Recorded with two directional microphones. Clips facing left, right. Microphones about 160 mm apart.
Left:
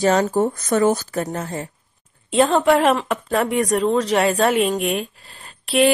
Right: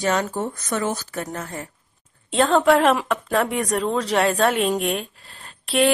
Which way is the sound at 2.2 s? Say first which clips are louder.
Left 1 dB; 5° left (ahead or behind).